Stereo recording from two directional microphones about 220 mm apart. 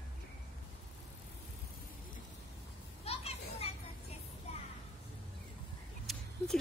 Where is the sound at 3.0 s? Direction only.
25° left (ahead or behind).